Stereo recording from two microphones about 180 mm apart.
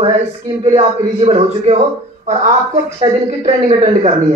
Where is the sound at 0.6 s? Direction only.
35° right (ahead or behind).